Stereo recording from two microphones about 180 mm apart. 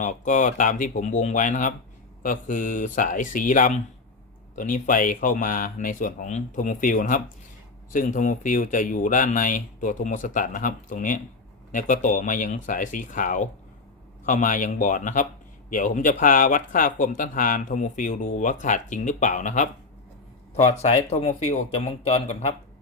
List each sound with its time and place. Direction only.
0.0 s speech: 45° left (ahead or behind)